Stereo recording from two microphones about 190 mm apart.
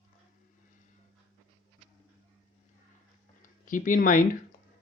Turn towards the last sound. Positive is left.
turn(degrees=45)  # may be behind; listen again after turning